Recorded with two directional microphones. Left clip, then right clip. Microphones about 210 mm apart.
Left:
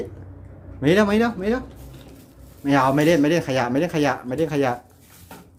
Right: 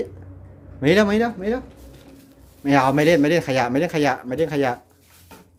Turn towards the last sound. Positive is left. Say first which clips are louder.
# right 1 dB
turn(degrees=-15)  # may be behind; listen again after turning